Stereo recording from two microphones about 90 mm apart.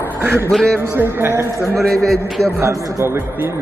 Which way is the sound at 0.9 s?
25° right (ahead or behind).